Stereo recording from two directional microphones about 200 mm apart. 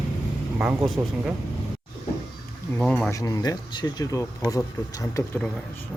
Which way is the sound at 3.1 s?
15° left (ahead or behind).